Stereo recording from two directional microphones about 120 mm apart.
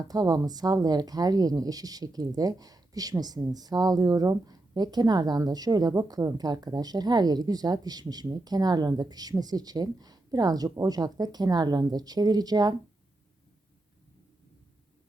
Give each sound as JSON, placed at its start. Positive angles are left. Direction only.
{"t": 0.0, "sound": "speech", "side_deg": -30}